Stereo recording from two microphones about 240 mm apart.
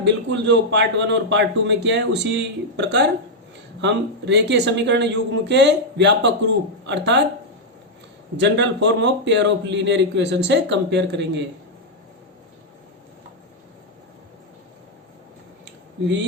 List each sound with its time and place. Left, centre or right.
0.0 s a man's voice: right
8.4 s a man's voice: right